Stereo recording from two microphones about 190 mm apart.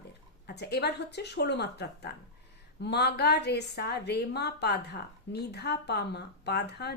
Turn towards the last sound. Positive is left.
turn(degrees=60)  # may be behind; listen again after turning